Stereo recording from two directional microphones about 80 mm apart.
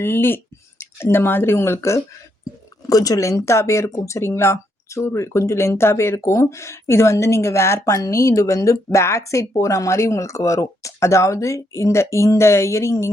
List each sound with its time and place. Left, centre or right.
0.0 s speech: left
2.4 s speech: left